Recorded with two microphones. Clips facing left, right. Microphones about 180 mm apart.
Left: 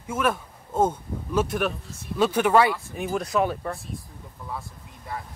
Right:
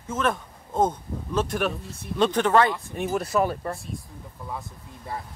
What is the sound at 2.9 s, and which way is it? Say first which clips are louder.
Speech: right 1 dB; centre (ahead or behind).